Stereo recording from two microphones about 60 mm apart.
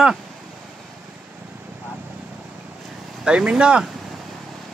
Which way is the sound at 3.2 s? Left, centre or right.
Centre.